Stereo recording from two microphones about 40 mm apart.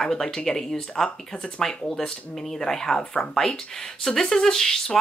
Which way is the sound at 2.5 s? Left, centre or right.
Centre.